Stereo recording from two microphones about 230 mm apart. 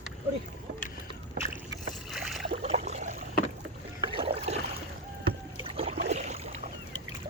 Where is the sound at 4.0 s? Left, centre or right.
Right.